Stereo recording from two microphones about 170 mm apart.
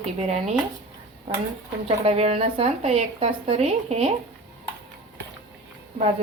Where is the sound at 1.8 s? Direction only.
35° right (ahead or behind).